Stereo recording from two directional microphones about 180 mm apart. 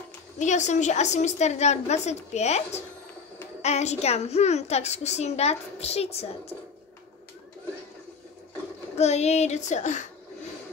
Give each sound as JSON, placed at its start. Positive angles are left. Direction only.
{"t": 0.4, "sound": "a woman's voice", "side_deg": 40}
{"t": 8.9, "sound": "a woman's voice", "side_deg": 40}